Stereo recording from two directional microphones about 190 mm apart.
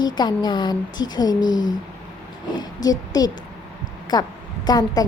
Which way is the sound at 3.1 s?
20° left (ahead or behind).